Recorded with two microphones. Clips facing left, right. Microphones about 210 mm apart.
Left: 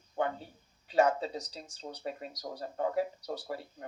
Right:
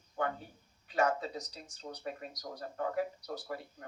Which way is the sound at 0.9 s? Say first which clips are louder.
Left 4 dB; 30° left (ahead or behind).